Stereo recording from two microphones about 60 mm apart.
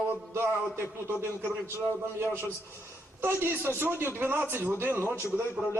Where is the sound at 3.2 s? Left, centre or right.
Right.